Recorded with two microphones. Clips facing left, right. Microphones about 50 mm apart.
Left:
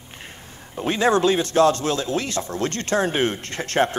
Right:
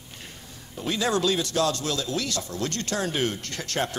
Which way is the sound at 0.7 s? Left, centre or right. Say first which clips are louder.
Left 6 dB; left.